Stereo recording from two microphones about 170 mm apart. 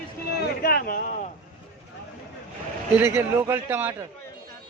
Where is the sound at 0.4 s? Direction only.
60° left (ahead or behind); by 1.3 s 45° left (ahead or behind).